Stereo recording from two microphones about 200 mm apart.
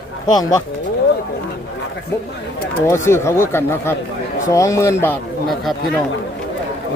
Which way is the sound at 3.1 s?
15° left (ahead or behind).